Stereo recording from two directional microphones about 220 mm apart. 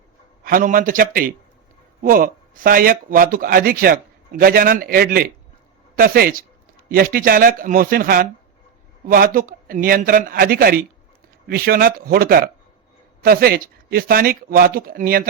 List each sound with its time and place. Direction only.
0.4 s speech: 40° right (ahead or behind)